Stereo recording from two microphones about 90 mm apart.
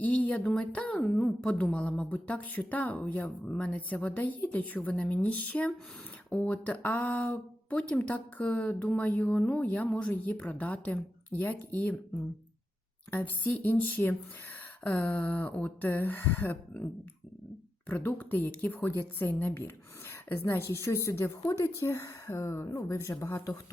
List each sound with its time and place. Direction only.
0.0 s speech: 15° left (ahead or behind)
13.1 s speech: 20° left (ahead or behind)